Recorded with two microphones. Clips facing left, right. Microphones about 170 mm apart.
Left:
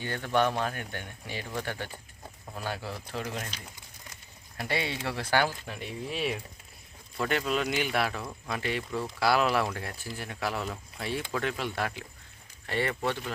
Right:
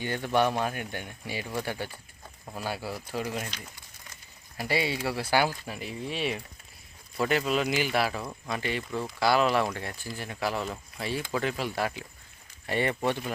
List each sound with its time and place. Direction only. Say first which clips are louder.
0.0 s speech: right 1 dB; 15° right (ahead or behind)
4.5 s speech: right 3 dB; 5° right (ahead or behind)
12.6 s speech: right 2 dB; 15° right (ahead or behind)